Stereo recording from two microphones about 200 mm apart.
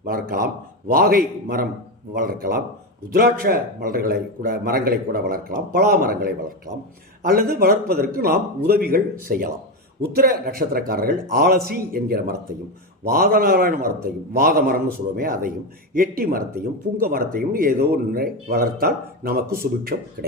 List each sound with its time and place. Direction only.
0.0 s a man's voice: 50° right (ahead or behind)